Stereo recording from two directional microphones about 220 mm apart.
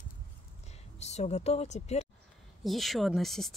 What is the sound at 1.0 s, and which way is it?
A woman's voice, 30° left (ahead or behind).